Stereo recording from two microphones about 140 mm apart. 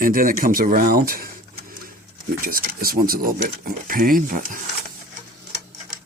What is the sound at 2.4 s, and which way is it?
Speech, 90° right.